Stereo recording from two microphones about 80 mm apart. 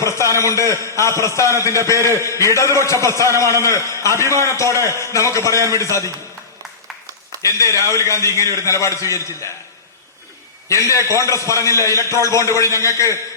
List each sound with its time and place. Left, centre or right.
0.0 s a man's voice: left
4.7 s a man's voice: right
4.9 s a man's voice: left
7.4 s a man's voice: left
10.7 s a man's voice: left